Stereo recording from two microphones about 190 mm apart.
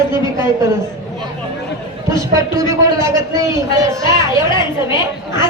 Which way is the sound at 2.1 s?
15° right (ahead or behind).